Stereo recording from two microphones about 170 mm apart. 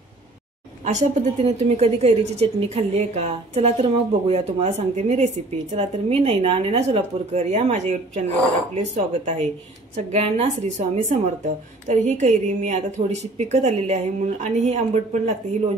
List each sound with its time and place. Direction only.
0.8 s a woman's voice: 45° right (ahead or behind)